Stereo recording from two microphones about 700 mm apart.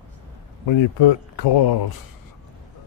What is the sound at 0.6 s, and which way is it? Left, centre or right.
Speech, left.